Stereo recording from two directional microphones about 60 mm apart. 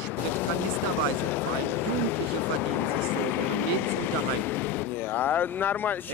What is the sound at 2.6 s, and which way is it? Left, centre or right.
Speech, left.